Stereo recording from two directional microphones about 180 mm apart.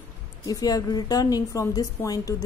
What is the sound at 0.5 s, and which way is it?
A woman's voice, 20° left (ahead or behind).